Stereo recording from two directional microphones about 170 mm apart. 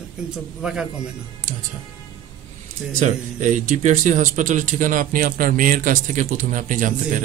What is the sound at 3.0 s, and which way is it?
Speech, 45° right (ahead or behind).